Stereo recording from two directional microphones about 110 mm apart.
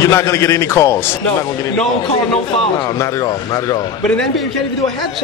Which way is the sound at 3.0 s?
30° left (ahead or behind).